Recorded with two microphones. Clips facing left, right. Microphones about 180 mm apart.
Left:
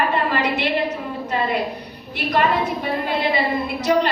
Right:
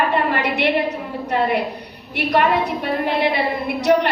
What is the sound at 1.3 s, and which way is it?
A woman's voice, 65° right (ahead or behind).